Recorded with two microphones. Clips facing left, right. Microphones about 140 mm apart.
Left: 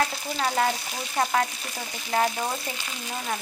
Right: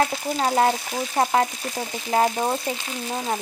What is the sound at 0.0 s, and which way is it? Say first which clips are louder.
Frying: right 4 dB; 35° right (ahead or behind).